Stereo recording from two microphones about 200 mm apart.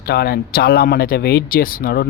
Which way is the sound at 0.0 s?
50° left (ahead or behind).